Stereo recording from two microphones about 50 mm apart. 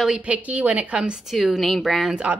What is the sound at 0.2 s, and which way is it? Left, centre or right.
Speech, right.